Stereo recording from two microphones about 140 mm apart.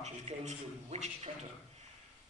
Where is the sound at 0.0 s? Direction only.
55° right (ahead or behind).